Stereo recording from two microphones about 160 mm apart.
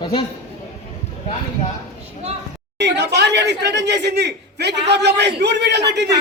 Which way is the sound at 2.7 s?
90° right.